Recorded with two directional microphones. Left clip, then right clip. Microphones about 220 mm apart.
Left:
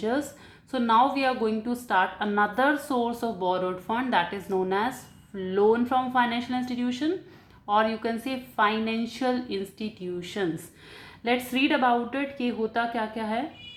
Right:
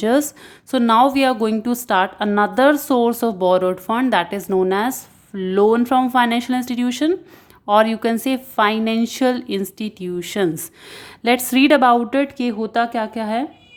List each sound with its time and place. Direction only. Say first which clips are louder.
0.0 s a woman's voice: right 11 dB; 50° right (ahead or behind)